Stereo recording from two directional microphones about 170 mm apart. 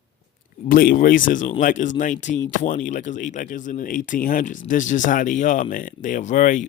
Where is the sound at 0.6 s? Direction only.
55° left (ahead or behind).